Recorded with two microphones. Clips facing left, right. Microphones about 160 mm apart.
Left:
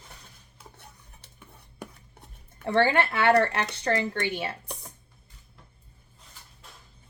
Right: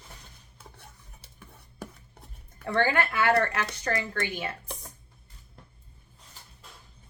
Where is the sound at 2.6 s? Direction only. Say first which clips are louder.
Left 3 dB; 25° left (ahead or behind).